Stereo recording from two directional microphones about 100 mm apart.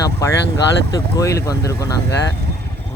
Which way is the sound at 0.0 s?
35° left (ahead or behind).